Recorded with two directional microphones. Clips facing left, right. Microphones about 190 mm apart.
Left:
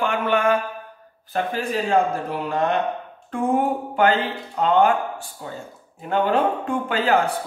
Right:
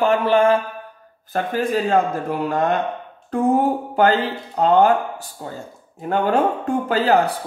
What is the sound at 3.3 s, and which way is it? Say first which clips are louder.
A man's voice: right 3 dB; 40° right (ahead or behind).